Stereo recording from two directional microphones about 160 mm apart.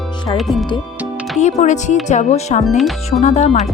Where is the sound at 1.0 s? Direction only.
5° right (ahead or behind).